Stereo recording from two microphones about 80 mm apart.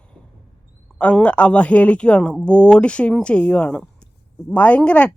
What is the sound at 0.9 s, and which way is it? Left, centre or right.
Speech, centre.